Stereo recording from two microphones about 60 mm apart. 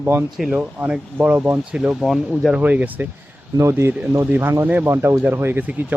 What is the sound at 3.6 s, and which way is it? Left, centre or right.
Speech, right.